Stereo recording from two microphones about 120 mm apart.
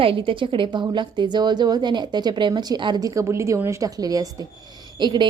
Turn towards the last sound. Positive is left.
turn(degrees=-40)  # may be behind; listen again after turning